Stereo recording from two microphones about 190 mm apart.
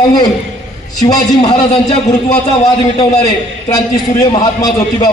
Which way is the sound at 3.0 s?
20° left (ahead or behind).